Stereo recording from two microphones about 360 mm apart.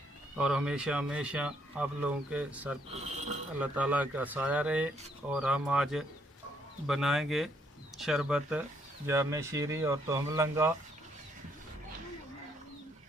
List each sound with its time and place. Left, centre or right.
0.3 s speech: centre
2.9 s speech: centre
3.6 s speech: centre